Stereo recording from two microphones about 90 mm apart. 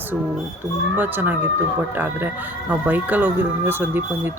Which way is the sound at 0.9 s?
20° right (ahead or behind).